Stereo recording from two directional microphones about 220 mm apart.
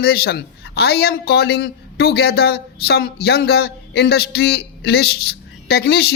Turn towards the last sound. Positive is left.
turn(degrees=45)  # may be behind; listen again after turning